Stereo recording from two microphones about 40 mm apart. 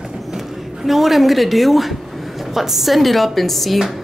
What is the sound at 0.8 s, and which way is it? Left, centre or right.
Speech, centre.